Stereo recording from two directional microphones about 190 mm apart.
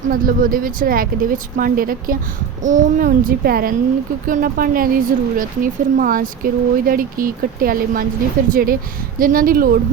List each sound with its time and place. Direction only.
0.1 s speech: 45° right (ahead or behind)